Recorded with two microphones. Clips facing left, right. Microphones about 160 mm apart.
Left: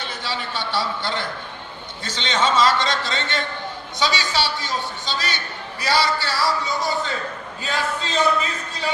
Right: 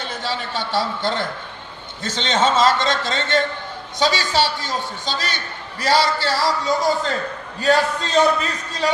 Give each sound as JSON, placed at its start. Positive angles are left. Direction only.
{"t": 0.0, "sound": "a man's voice", "side_deg": -45}